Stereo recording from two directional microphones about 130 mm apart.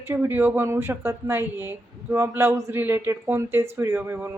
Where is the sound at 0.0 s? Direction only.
20° right (ahead or behind).